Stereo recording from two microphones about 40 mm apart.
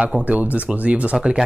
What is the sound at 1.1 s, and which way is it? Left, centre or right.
Speech, centre.